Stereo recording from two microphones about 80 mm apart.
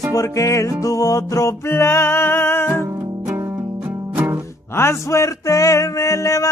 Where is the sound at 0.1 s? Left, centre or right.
Left.